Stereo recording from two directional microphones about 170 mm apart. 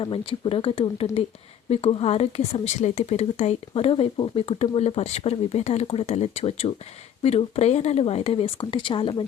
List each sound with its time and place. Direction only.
0.0 s speech: 30° left (ahead or behind)